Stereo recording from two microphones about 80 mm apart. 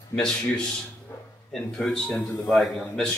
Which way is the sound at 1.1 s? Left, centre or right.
Left.